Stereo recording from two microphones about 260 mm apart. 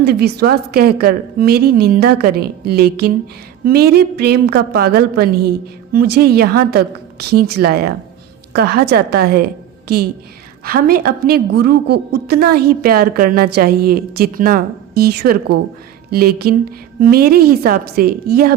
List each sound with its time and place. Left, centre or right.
0.0 s a woman's voice: right